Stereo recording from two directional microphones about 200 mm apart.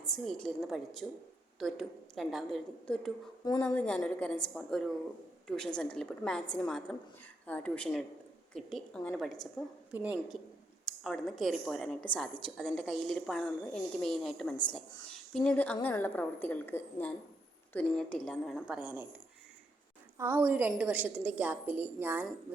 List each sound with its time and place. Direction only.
0.1 s a woman's voice: centre (ahead or behind)
20.1 s a woman's voice: 10° right (ahead or behind)